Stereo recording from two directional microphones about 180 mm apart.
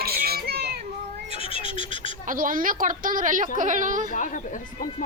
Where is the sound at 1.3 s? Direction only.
30° left (ahead or behind).